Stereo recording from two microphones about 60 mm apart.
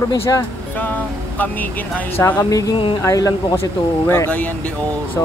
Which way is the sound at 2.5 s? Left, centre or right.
Left.